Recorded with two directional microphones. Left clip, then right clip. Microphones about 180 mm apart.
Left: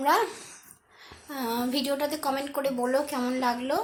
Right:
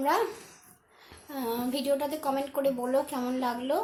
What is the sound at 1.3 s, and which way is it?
A woman's voice, 15° left (ahead or behind).